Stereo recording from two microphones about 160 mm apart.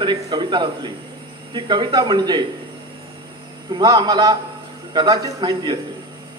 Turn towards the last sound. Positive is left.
turn(degrees=-25)  # may be behind; listen again after turning